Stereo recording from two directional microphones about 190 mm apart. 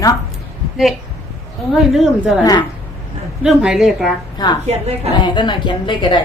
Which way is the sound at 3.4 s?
5° right (ahead or behind).